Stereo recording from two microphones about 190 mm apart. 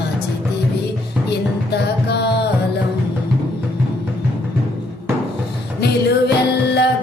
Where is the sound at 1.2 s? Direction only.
60° left (ahead or behind).